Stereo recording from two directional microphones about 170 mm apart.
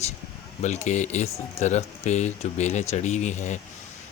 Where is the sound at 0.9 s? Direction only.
45° left (ahead or behind).